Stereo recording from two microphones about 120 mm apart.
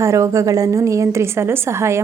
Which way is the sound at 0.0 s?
25° right (ahead or behind).